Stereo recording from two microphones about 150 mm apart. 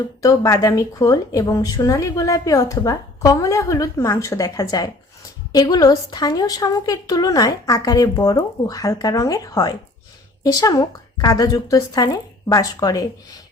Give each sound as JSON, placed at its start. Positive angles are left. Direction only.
{"t": 0.2, "sound": "speech", "side_deg": 25}